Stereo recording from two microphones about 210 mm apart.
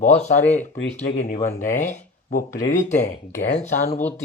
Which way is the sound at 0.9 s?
35° left (ahead or behind).